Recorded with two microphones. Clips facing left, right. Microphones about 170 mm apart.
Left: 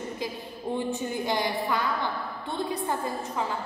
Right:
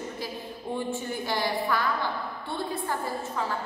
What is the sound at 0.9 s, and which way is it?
Speech, 20° left (ahead or behind).